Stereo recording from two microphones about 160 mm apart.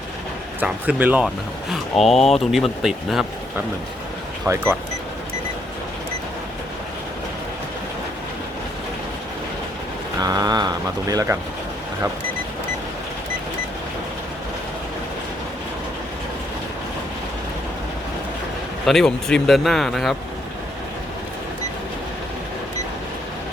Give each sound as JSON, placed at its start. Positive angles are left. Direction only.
{"t": 0.6, "sound": "speech", "side_deg": -10}
{"t": 1.7, "sound": "speech", "side_deg": 0}
{"t": 4.4, "sound": "speech", "side_deg": -15}
{"t": 10.2, "sound": "a sound", "side_deg": -25}
{"t": 18.9, "sound": "speech", "side_deg": 0}